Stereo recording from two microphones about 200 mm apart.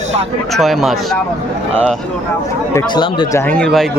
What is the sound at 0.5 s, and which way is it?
Speech, centre (ahead or behind).